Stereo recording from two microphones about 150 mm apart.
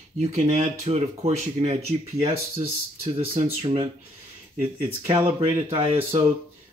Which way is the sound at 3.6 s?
35° right (ahead or behind).